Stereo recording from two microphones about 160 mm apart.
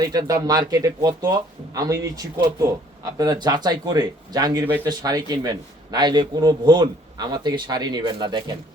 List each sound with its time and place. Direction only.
0.0 s speech: 25° right (ahead or behind)
4.6 s speech: 10° right (ahead or behind)
4.9 s speech: 25° right (ahead or behind)